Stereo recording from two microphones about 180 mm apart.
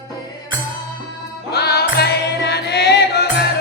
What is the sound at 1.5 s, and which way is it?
Music, 65° left (ahead or behind).